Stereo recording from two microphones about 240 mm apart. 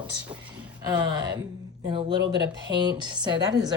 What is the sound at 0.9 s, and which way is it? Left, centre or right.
A woman's voice, centre.